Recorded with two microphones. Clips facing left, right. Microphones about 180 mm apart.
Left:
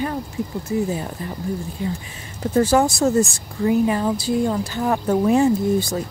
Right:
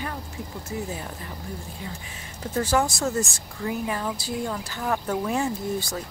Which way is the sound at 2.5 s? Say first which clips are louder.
Left 7 dB; 35° left (ahead or behind).